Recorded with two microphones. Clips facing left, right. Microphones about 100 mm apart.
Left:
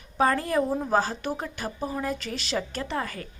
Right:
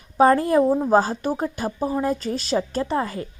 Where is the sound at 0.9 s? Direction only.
35° right (ahead or behind).